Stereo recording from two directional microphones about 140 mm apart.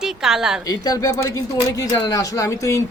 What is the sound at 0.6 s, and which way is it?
Speech, 25° left (ahead or behind).